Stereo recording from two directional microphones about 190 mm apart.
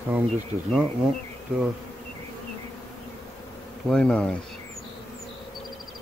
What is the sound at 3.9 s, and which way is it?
Speech, 5° left (ahead or behind).